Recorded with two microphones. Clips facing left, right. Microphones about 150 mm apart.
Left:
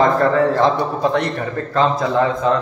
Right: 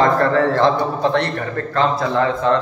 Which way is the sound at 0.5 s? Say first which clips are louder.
Even; 10° left (ahead or behind).